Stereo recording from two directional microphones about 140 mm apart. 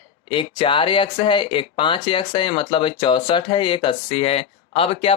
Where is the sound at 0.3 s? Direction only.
35° left (ahead or behind).